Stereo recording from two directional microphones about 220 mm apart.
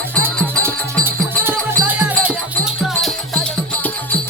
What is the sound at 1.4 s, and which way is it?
Music, 10° right (ahead or behind).